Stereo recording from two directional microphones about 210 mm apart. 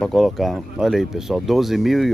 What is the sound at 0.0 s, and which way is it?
Speech, centre (ahead or behind).